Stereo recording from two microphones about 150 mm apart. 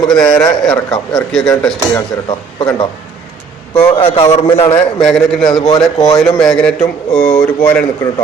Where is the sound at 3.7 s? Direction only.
35° left (ahead or behind).